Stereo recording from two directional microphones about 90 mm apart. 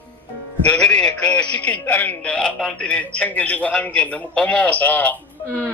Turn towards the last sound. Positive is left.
turn(degrees=15)  # may be behind; listen again after turning